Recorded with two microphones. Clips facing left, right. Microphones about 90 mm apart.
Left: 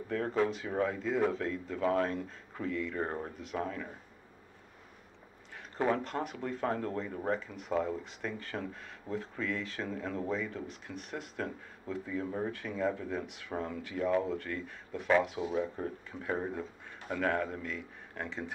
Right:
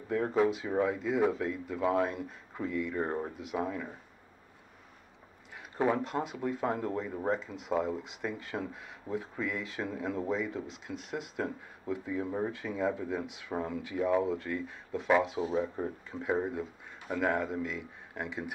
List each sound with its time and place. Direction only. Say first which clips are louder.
0.1 s speech: right 3 dB; 15° right (ahead or behind)
5.8 s speech: right 2 dB; 10° right (ahead or behind)